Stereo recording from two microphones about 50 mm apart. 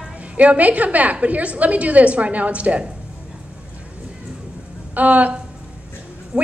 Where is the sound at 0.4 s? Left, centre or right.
Right.